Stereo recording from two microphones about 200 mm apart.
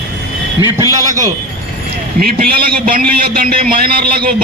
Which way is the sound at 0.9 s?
15° right (ahead or behind).